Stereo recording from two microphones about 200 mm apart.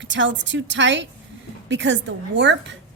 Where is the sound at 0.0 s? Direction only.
65° right (ahead or behind).